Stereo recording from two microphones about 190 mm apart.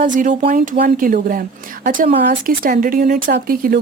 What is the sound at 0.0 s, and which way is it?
A woman's voice, 45° right (ahead or behind).